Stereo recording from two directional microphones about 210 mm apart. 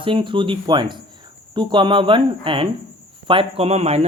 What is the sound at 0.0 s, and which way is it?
Speech, 25° right (ahead or behind).